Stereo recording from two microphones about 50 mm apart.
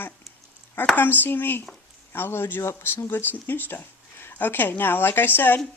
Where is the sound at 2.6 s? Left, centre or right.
Left.